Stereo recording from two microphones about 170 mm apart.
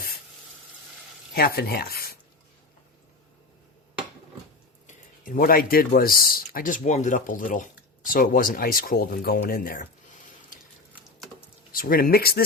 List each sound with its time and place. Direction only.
1.3 s speech: 65° left (ahead or behind)
4.9 s speech: 50° left (ahead or behind)
11.7 s speech: 60° left (ahead or behind)